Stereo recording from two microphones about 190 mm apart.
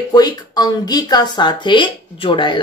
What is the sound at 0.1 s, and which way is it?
Speech, 20° left (ahead or behind).